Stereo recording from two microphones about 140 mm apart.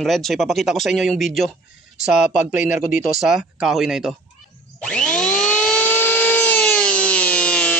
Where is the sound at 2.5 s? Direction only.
65° left (ahead or behind).